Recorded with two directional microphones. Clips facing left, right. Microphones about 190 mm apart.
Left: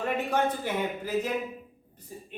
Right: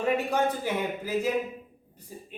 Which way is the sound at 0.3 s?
10° right (ahead or behind).